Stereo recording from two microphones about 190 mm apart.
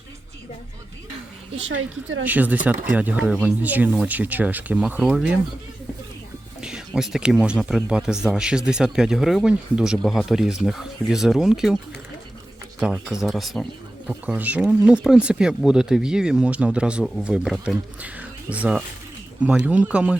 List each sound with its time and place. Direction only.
1.5 s a woman's voice: 90° right
2.2 s speech: 10° right (ahead or behind)
6.6 s speech: 5° right (ahead or behind)
12.8 s speech: 5° right (ahead or behind)